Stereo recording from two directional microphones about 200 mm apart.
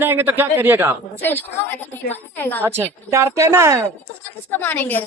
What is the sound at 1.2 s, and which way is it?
A woman's voice, 10° left (ahead or behind).